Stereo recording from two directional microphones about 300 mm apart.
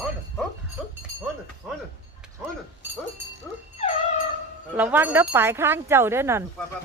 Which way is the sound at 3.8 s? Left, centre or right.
Centre.